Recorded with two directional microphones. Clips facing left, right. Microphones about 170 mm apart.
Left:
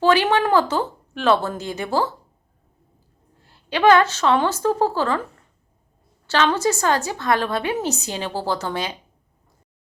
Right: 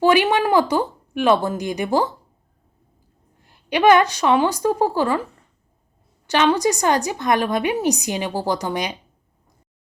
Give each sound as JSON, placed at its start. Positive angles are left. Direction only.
{"t": 0.0, "sound": "a woman's voice", "side_deg": -15}
{"t": 3.4, "sound": "a woman's voice", "side_deg": -15}
{"t": 6.2, "sound": "a woman's voice", "side_deg": -15}